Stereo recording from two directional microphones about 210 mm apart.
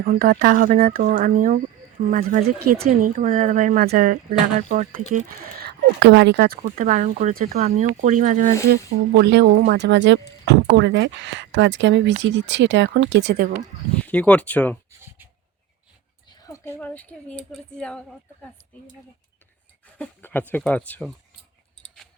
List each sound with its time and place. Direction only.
0.0 s speech: 50° right (ahead or behind)
9.1 s speech: 55° right (ahead or behind)
14.0 s speech: 5° left (ahead or behind)
16.3 s a woman's voice: 15° left (ahead or behind)
20.0 s speech: 10° left (ahead or behind)